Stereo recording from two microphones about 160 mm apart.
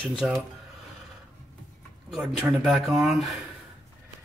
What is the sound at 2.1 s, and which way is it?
Speech, centre (ahead or behind).